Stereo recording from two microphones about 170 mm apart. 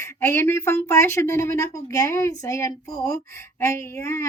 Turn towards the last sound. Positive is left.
turn(degrees=15)  # may be behind; listen again after turning